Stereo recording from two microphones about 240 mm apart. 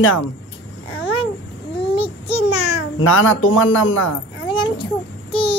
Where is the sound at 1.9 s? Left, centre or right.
Left.